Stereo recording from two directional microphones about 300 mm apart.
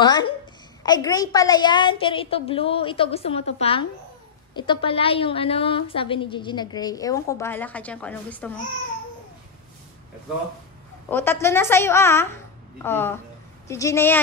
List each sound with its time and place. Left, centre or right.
0.0 s a woman's voice: centre
11.1 s a woman's voice: centre